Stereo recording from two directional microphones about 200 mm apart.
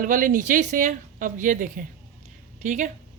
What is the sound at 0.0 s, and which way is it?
Speech, 40° right (ahead or behind).